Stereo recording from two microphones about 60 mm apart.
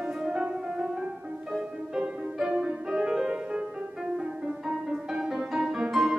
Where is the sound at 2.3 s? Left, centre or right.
Centre.